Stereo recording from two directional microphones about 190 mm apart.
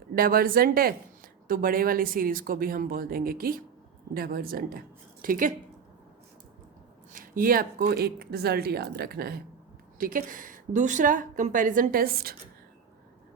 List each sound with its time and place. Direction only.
0.2 s a woman's voice: 50° right (ahead or behind)
7.1 s a woman's voice: 45° right (ahead or behind)